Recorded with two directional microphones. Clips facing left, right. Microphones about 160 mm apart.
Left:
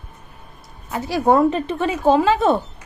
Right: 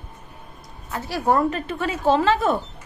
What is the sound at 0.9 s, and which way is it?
A woman's voice, 15° left (ahead or behind).